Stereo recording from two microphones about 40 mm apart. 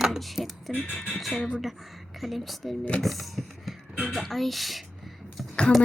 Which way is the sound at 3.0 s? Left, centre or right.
Centre.